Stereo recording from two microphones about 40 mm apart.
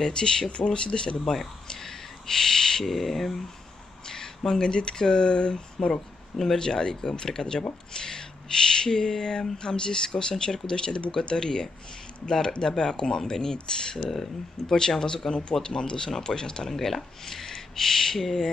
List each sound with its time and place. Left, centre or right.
0.0 s speech: centre
1.2 s speech: centre
4.5 s speech: centre
6.3 s speech: centre
16.7 s speech: centre